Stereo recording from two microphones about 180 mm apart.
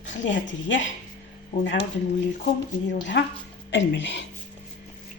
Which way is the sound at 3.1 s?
70° left (ahead or behind).